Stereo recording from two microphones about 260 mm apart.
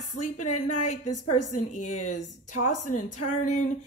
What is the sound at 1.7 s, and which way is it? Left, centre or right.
Speech, left.